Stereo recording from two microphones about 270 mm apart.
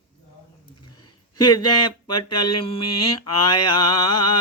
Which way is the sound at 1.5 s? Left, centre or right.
Left.